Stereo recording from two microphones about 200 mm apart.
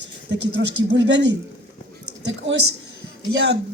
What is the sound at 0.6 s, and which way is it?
Speech, 65° right (ahead or behind).